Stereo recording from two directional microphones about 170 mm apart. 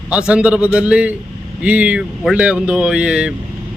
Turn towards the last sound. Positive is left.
turn(degrees=-5)  # may be behind; listen again after turning